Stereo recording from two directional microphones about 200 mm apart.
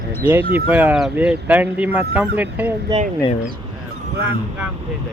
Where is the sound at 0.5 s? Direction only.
10° right (ahead or behind).